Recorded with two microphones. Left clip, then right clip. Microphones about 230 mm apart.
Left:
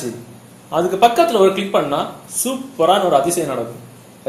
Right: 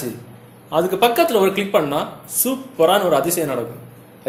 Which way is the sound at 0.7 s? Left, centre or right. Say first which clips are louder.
Left 3 dB; right.